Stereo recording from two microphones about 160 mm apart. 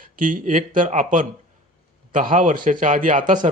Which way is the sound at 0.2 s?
55° right (ahead or behind).